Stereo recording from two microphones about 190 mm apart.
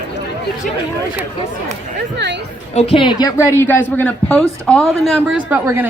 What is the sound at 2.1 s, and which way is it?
Speech, 65° right (ahead or behind).